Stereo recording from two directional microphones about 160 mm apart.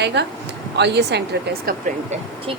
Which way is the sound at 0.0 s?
90° right.